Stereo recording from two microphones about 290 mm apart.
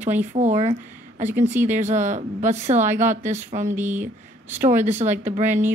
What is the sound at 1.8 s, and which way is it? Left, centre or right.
Speech, right.